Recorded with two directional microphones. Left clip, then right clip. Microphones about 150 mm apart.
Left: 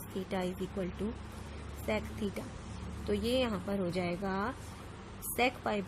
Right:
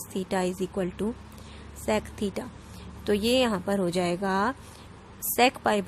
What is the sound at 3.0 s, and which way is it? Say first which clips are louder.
A woman's voice: right 8 dB; 55° right (ahead or behind).